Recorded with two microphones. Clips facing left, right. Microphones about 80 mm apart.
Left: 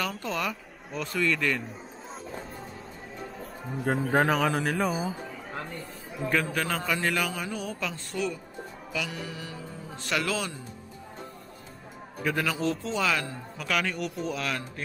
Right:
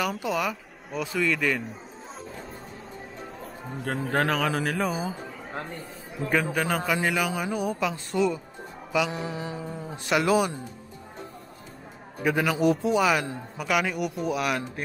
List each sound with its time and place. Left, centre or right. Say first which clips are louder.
0.0 s speech: right 4 dB; centre
3.8 s speech: left 2 dB; centre
6.2 s a man's voice: right 2 dB; centre
12.2 s a man's voice: right 5 dB; centre